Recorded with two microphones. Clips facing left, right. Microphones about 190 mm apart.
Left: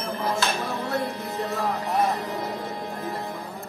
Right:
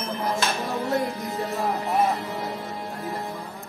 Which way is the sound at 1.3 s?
15° right (ahead or behind).